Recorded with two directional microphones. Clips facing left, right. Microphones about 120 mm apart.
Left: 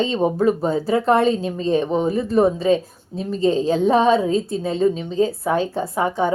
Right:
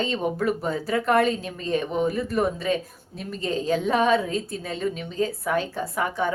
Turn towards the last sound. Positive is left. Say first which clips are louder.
# left 5 dB
turn(degrees=30)  # may be behind; listen again after turning